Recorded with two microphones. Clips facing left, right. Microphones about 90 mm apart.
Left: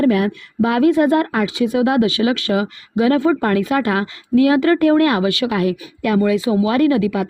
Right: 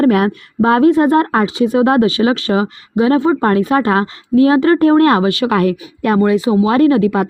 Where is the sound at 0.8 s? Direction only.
30° right (ahead or behind).